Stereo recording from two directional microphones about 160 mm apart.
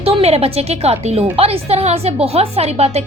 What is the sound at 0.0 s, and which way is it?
A woman's voice, 40° right (ahead or behind).